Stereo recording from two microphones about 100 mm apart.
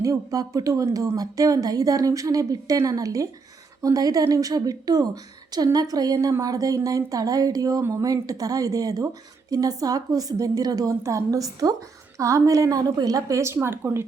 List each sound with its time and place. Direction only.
0.0 s a woman's voice: 35° right (ahead or behind)